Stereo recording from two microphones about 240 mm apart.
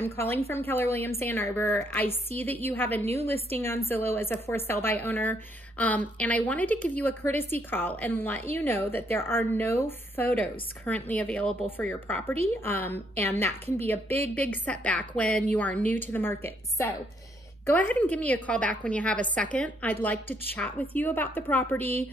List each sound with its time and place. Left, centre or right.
0.0 s a woman's voice: centre
3.1 s a woman's voice: right
3.5 s a woman's voice: centre